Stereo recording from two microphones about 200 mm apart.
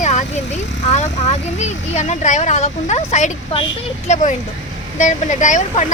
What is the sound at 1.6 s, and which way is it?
Speech, 35° left (ahead or behind).